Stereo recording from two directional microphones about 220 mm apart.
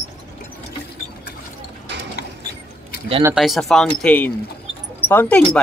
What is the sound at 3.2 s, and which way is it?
Speech, centre (ahead or behind).